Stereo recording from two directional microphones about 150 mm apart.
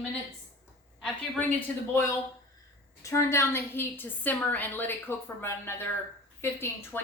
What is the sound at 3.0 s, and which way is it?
A woman's voice, 20° left (ahead or behind).